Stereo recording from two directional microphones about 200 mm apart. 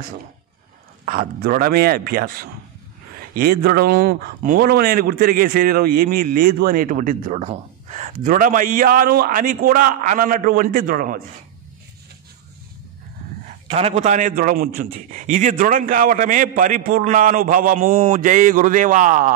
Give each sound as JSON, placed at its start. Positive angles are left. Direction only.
{"t": 1.0, "sound": "speech", "side_deg": -45}
{"t": 13.7, "sound": "speech", "side_deg": -30}